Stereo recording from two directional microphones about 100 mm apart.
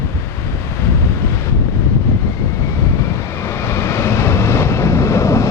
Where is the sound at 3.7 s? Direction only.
30° left (ahead or behind).